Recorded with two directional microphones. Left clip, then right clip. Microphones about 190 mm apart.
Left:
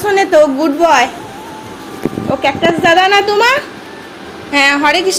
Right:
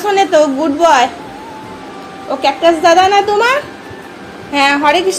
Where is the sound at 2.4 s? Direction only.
10° left (ahead or behind).